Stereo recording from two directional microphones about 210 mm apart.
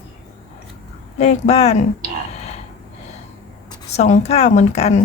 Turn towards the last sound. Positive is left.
turn(degrees=30)  # may be behind; listen again after turning